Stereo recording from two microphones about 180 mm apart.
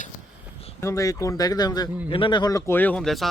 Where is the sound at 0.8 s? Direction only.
15° left (ahead or behind).